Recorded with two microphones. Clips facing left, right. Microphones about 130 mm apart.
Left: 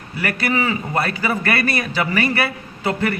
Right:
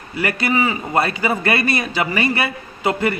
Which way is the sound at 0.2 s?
20° right (ahead or behind).